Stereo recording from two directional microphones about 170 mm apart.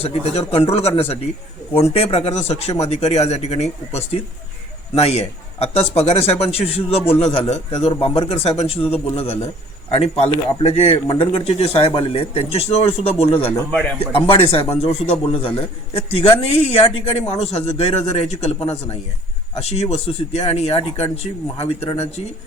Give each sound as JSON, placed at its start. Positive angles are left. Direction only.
{"t": 0.0, "sound": "a man's voice", "side_deg": 35}